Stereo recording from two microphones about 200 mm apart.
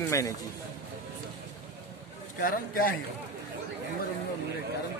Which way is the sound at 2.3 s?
45° left (ahead or behind).